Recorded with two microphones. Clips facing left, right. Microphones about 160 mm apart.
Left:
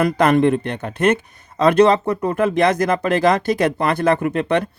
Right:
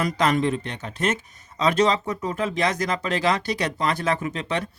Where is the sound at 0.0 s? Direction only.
55° left (ahead or behind).